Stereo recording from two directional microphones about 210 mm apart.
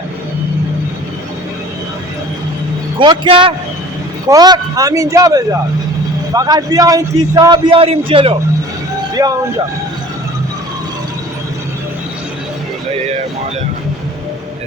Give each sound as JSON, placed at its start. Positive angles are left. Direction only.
{"t": 3.0, "sound": "a man's voice", "side_deg": -25}